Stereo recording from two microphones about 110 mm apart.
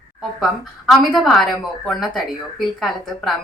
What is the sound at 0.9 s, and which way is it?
A woman's voice, centre (ahead or behind).